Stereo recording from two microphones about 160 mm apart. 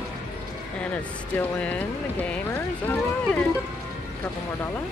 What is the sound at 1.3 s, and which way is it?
Speech, 10° left (ahead or behind).